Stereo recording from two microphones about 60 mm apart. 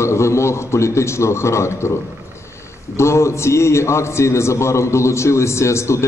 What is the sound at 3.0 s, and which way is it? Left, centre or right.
A man's voice, left.